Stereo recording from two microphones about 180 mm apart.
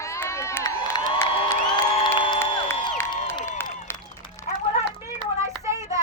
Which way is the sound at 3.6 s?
10° left (ahead or behind).